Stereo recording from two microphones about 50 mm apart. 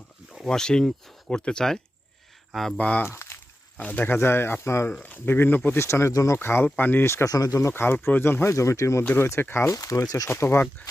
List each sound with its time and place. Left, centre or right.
0.4 s speech: centre
2.7 s speech: left
3.1 s a sound: left
3.8 s speech: left
4.0 s speech: left
5.0 s speech: left
5.7 s speech: left
6.4 s speech: left
6.7 s speech: left
7.0 s speech: left
9.1 s speech: left